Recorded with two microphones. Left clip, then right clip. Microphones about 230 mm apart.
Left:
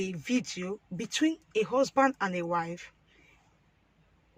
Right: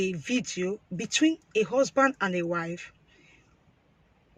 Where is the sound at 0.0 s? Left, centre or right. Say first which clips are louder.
Right 3 dB; centre.